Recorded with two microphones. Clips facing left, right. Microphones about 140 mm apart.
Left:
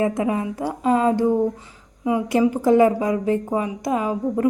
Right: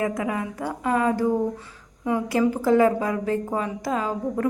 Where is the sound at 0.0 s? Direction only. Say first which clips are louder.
Left 4 dB; 25° left (ahead or behind).